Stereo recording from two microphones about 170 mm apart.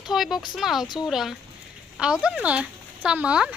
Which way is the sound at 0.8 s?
25° left (ahead or behind).